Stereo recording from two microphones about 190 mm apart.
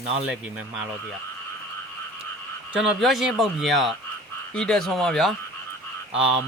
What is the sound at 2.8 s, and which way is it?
Speech, centre (ahead or behind).